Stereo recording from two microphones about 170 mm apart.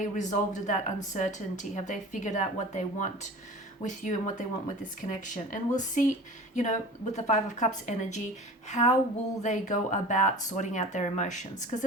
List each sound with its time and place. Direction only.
0.0 s a woman's voice: 45° left (ahead or behind)
8.7 s a sound: 40° left (ahead or behind)
9.4 s a woman's voice: 45° left (ahead or behind)